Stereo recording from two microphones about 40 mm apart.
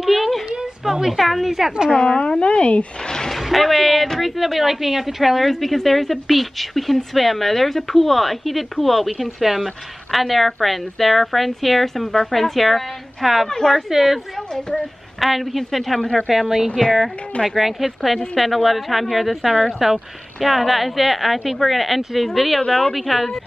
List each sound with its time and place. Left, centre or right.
0.0 s a sound: centre
0.9 s speech: centre
2.0 s speech: centre
3.1 s speech: centre
3.3 s speech: centre
16.0 s a woman's voice: centre
16.3 s speech: centre
22.6 s speech: centre